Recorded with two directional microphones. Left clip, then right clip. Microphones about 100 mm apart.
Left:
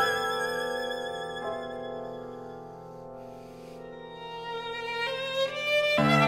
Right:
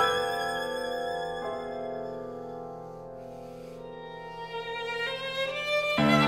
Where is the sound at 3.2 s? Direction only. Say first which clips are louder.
Right 2 dB; 45° left (ahead or behind).